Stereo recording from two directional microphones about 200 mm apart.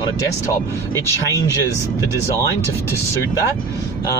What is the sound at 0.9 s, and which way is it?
Speech, 15° left (ahead or behind).